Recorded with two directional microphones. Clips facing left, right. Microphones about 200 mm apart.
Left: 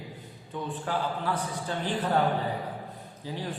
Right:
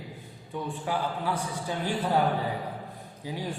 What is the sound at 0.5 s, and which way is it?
A man's voice, 10° right (ahead or behind).